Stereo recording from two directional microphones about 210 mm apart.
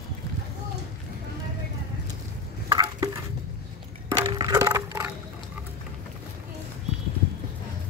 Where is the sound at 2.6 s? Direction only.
15° right (ahead or behind).